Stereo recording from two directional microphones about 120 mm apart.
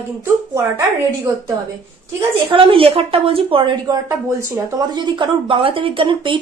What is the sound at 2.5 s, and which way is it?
Speech, 45° right (ahead or behind).